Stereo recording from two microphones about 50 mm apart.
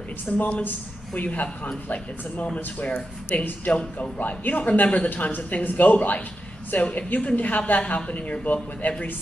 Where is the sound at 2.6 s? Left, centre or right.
Left.